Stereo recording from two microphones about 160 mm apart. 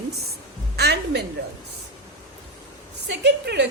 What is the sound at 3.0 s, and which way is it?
Speech, 90° right.